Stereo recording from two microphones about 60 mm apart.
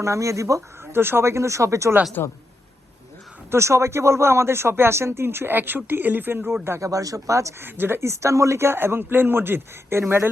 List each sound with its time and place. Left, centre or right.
0.0 s speech: right
0.9 s speech: right
2.2 s a man's voice: left
3.5 s speech: right
6.7 s speech: right
7.6 s speech: right